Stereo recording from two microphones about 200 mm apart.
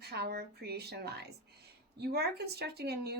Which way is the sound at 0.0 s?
55° right (ahead or behind).